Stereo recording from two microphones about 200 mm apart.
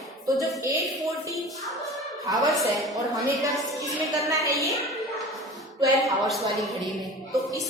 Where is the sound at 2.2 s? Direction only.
20° right (ahead or behind).